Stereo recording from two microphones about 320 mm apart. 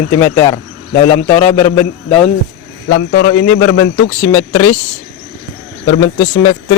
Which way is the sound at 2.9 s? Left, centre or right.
Left.